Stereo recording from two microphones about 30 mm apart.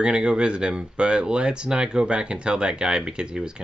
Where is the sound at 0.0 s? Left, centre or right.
Right.